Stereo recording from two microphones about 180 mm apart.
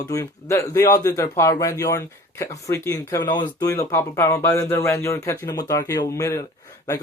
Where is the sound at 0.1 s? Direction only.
15° left (ahead or behind).